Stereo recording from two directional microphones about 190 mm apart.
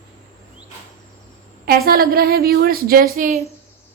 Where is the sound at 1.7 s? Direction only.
50° right (ahead or behind).